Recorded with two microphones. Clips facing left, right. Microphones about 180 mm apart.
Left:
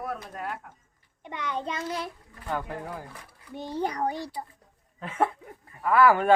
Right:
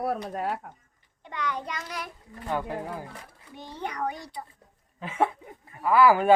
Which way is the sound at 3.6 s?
35° left (ahead or behind).